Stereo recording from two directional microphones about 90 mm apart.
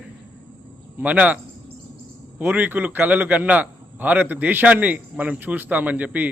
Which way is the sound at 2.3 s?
20° right (ahead or behind).